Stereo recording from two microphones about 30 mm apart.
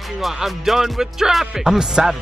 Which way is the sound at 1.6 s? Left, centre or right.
Right.